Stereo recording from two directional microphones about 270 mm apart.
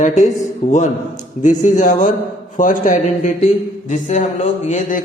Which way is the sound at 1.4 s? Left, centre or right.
Left.